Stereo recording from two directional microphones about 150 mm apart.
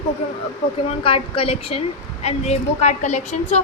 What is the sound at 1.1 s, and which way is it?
A woman's voice, 40° left (ahead or behind).